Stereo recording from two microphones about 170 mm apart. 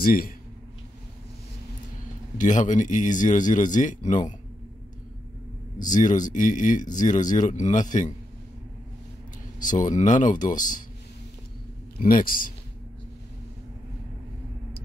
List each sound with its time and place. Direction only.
0.0 s speech: 60° left (ahead or behind)
2.3 s a man's voice: 45° left (ahead or behind)
5.8 s a man's voice: 50° left (ahead or behind)
9.6 s a man's voice: 50° left (ahead or behind)
12.0 s speech: 55° left (ahead or behind)